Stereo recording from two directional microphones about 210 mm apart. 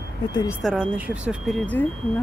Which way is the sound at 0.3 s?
20° left (ahead or behind).